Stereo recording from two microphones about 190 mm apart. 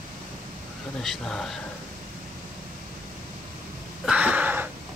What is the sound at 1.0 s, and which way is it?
Speech, 5° left (ahead or behind).